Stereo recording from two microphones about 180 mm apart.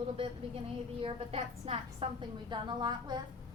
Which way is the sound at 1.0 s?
35° right (ahead or behind).